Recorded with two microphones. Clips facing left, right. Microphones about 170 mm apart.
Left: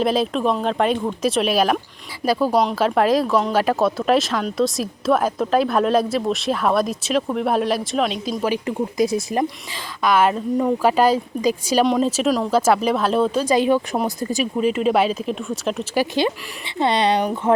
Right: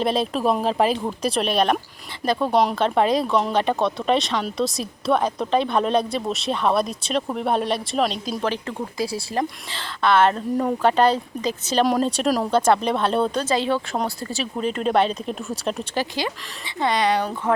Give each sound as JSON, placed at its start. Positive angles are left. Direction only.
{"t": 0.0, "sound": "speech", "side_deg": 0}
{"t": 13.4, "sound": "speech", "side_deg": 15}
{"t": 16.0, "sound": "speech", "side_deg": 20}